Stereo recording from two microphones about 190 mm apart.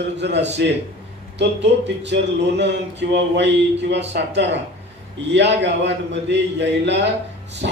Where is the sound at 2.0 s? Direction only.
65° right (ahead or behind).